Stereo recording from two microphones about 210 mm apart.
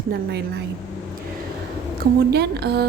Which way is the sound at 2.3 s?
50° right (ahead or behind).